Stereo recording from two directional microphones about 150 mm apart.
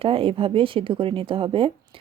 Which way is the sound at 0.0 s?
35° right (ahead or behind).